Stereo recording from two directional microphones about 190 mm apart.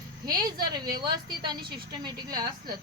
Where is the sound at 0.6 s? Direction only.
20° right (ahead or behind).